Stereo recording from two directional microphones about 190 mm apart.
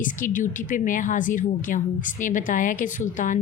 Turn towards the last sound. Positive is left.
turn(degrees=40)  # may be behind; listen again after turning